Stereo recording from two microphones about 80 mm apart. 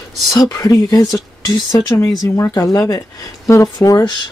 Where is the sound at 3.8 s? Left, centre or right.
Left.